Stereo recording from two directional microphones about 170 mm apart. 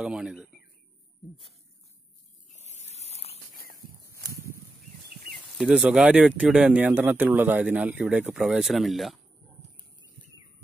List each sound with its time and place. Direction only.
0.0 s speech: 5° right (ahead or behind)
2.5 s a sound: 40° left (ahead or behind)
3.5 s walk: 60° left (ahead or behind)
5.1 s speech: centre (ahead or behind)